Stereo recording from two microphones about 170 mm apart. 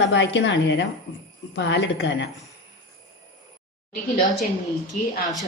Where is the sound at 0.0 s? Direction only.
90° left.